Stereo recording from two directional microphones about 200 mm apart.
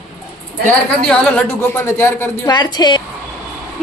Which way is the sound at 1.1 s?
5° left (ahead or behind).